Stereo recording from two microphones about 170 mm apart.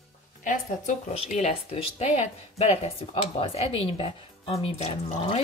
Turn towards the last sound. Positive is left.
turn(degrees=40)  # may be behind; listen again after turning